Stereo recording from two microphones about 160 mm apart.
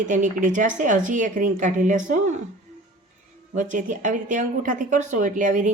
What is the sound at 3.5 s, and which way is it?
A woman's voice, 55° right (ahead or behind).